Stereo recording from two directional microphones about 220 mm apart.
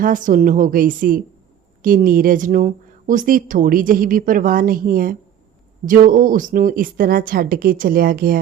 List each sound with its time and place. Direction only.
0.0 s speech: 35° right (ahead or behind)